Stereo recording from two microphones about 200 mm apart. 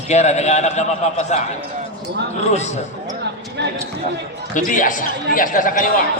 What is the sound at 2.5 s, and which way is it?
Speech, 35° left (ahead or behind).